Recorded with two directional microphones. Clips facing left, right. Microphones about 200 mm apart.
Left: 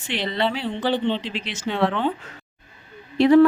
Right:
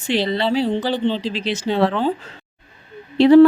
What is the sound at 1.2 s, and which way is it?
Speech, 35° right (ahead or behind).